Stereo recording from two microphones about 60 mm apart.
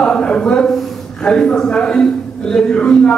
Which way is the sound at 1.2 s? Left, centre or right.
Centre.